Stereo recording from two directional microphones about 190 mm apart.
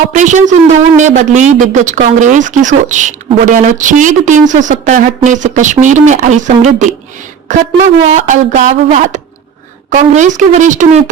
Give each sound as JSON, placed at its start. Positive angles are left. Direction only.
{"t": 0.1, "sound": "speech", "side_deg": -40}